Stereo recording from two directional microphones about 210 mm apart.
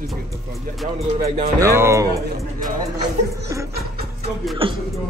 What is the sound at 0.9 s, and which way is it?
Speech, 30° right (ahead or behind).